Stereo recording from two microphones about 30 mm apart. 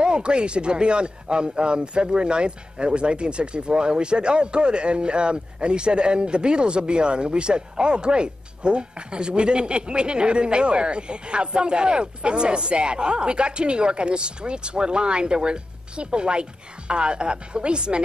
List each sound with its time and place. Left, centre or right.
0.0 s speech: right